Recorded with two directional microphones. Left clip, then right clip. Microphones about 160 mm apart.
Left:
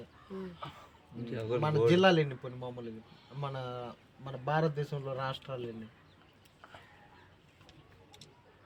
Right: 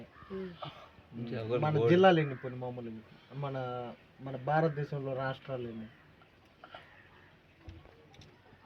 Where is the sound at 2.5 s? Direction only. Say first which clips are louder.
Right 1 dB; 5° left (ahead or behind).